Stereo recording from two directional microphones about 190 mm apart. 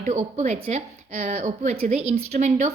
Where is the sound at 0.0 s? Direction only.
40° right (ahead or behind).